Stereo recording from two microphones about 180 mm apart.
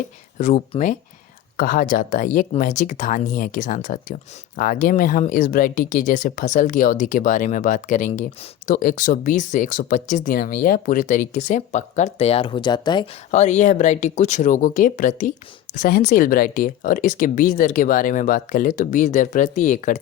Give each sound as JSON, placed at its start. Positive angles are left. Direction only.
{"t": 0.3, "sound": "speech", "side_deg": 45}
{"t": 13.3, "sound": "speech", "side_deg": 40}